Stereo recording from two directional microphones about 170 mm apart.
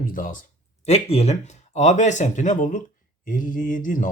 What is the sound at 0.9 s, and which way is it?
Speech, 35° left (ahead or behind).